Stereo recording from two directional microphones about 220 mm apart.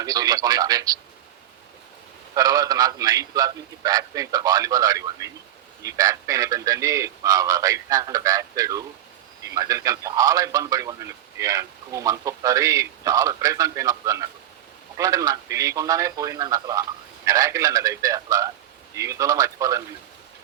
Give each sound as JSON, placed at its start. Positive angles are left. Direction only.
{"t": 0.0, "sound": "a man's voice", "side_deg": -15}
{"t": 2.3, "sound": "a man's voice", "side_deg": -15}